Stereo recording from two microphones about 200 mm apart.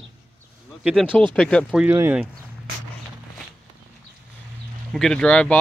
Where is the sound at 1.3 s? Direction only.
5° left (ahead or behind).